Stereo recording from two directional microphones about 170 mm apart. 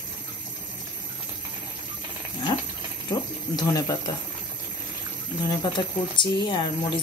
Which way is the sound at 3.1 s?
20° left (ahead or behind).